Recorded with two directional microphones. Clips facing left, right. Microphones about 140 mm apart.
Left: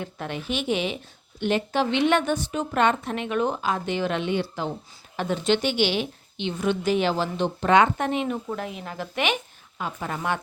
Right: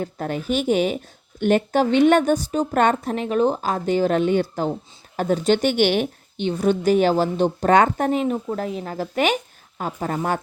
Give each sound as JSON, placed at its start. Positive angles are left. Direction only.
{"t": 0.0, "sound": "a woman's voice", "side_deg": -40}